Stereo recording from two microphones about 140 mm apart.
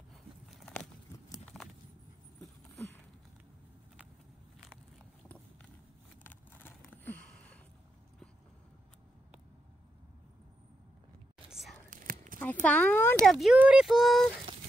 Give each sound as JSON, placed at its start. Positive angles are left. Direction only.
{"t": 0.5, "sound": "a sound", "side_deg": 0}
{"t": 1.4, "sound": "walk", "side_deg": 5}
{"t": 6.2, "sound": "a sound", "side_deg": 15}
{"t": 11.5, "sound": "whispering", "side_deg": 0}
{"t": 11.9, "sound": "whispering", "side_deg": -75}
{"t": 12.6, "sound": "speech", "side_deg": 10}
{"t": 13.2, "sound": "speech", "side_deg": 0}